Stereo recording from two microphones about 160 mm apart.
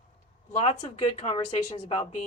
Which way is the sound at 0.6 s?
45° left (ahead or behind).